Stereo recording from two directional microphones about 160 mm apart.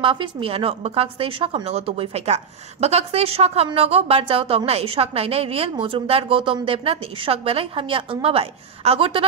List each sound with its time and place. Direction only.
0.0 s a woman's voice: 30° right (ahead or behind)